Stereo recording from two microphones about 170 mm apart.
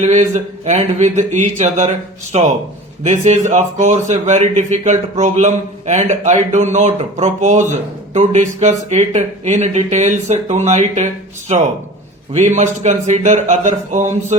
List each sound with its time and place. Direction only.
0.0 s a man's voice: 45° right (ahead or behind)